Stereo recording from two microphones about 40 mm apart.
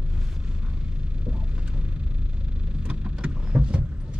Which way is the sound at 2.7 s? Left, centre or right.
Right.